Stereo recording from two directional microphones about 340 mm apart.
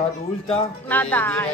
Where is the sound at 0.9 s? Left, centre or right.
Centre.